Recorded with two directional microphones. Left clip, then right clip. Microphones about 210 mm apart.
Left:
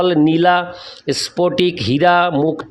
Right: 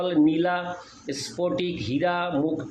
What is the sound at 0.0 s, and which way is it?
Speech, 55° left (ahead or behind).